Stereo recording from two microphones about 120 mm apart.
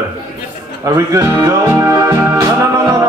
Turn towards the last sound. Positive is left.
turn(degrees=-25)  # may be behind; listen again after turning